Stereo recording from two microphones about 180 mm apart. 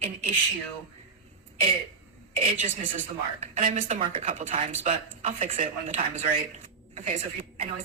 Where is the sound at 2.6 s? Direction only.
45° right (ahead or behind).